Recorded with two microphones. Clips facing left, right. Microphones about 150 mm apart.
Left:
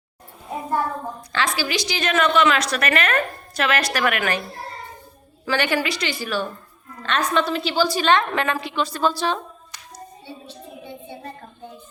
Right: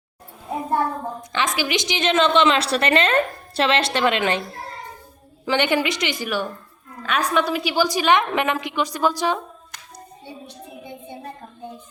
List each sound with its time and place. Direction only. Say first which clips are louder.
1.3 s a woman's voice: right 1 dB; 20° right (ahead or behind)
5.5 s a woman's voice: right 2 dB; 20° right (ahead or behind)